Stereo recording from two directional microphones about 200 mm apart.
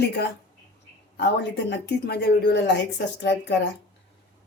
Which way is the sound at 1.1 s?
60° left (ahead or behind).